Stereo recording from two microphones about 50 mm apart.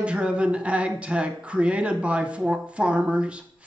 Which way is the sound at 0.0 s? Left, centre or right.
Right.